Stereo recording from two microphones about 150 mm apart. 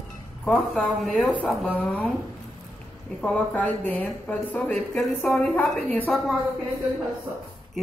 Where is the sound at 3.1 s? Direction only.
5° left (ahead or behind).